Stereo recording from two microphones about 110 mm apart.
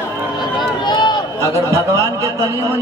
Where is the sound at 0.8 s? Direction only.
45° left (ahead or behind).